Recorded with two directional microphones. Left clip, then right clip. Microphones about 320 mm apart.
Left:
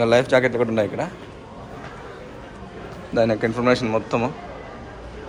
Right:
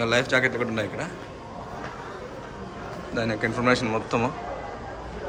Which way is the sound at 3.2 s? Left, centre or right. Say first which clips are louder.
Left 7 dB; centre.